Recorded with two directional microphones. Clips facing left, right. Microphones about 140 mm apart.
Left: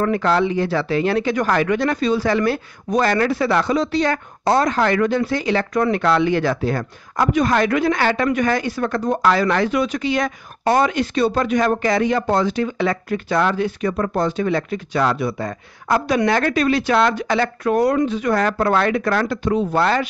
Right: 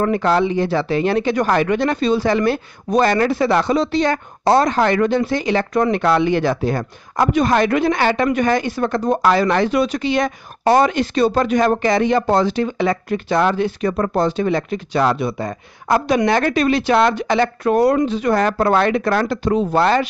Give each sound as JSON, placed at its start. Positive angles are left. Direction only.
{"t": 0.0, "sound": "speech", "side_deg": -20}
{"t": 11.6, "sound": "speech", "side_deg": -25}